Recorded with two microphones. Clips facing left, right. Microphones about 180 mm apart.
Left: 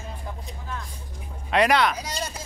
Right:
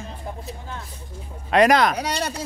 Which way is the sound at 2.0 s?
65° right (ahead or behind).